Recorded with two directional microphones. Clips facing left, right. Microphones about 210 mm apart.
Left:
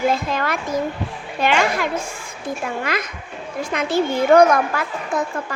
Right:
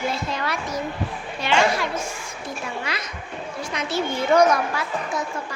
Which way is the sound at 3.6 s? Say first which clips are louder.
Left 6 dB; 55° left (ahead or behind).